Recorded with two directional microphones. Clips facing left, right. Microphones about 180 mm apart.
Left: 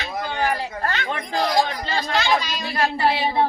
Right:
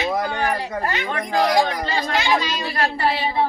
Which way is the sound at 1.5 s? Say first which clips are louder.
Right 2 dB; 15° right (ahead or behind).